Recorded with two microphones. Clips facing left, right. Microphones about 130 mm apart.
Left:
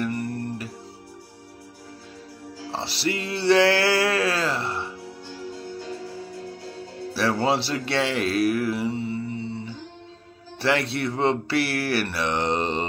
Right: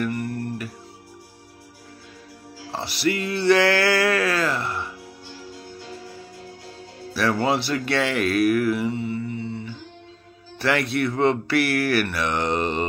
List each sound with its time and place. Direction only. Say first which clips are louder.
0.0 s music: right 1 dB; 30° left (ahead or behind)
2.6 s music: right 3 dB; 30° left (ahead or behind)
7.2 s speech: right 1 dB; 30° left (ahead or behind)